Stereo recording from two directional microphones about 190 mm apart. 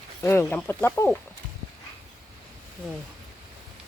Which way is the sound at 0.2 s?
10° left (ahead or behind).